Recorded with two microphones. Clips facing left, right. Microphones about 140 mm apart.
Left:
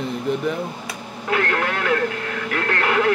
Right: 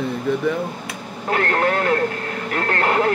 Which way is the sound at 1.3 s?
40° right (ahead or behind).